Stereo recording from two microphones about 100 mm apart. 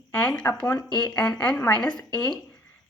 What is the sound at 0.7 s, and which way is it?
Speech, 45° left (ahead or behind).